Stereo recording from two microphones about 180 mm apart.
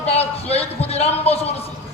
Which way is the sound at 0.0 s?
35° left (ahead or behind).